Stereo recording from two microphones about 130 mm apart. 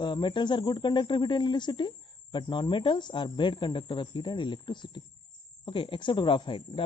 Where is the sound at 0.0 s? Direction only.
35° left (ahead or behind).